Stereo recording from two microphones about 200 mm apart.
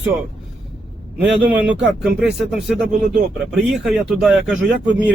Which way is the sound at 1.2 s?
5° right (ahead or behind).